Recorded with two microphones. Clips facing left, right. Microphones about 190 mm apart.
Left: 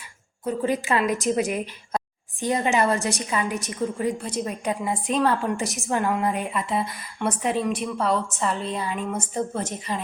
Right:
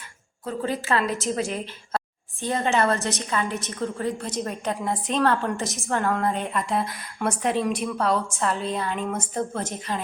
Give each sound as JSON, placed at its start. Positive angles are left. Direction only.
{"t": 0.4, "sound": "a woman's voice", "side_deg": 15}